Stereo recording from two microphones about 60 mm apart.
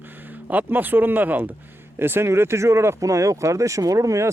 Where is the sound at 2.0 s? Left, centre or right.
Right.